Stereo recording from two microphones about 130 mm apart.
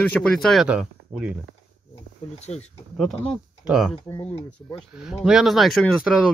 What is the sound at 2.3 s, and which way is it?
Speech, 55° left (ahead or behind).